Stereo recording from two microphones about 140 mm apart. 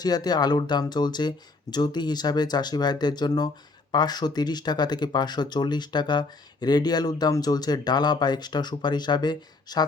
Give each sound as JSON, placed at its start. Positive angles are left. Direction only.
{"t": 0.0, "sound": "speech", "side_deg": 30}